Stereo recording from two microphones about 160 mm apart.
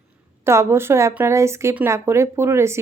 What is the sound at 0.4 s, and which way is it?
A woman's voice, 15° right (ahead or behind).